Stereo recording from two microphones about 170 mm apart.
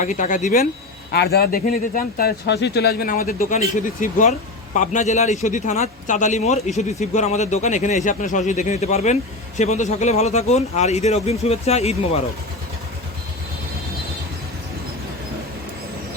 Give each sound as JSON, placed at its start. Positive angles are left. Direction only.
{"t": 0.0, "sound": "speech", "side_deg": 50}
{"t": 1.1, "sound": "speech", "side_deg": 70}